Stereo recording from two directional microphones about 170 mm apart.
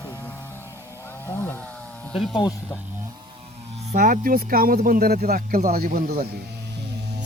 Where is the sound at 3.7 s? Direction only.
40° right (ahead or behind); by 6.4 s 65° right (ahead or behind).